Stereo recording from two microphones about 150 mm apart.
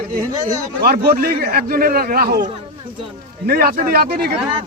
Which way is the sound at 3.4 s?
75° right (ahead or behind).